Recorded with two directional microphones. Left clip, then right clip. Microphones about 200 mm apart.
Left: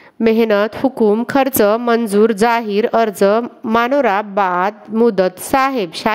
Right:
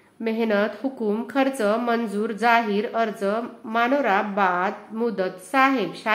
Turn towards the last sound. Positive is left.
turn(degrees=55)  # may be behind; listen again after turning